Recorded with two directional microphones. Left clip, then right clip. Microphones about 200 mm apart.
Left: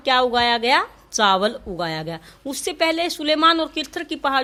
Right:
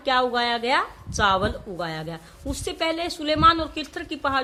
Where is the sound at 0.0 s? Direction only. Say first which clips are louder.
Left 4 dB; 40° left (ahead or behind).